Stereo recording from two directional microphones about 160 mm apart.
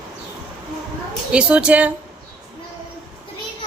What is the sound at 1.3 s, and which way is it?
Speech, 5° right (ahead or behind).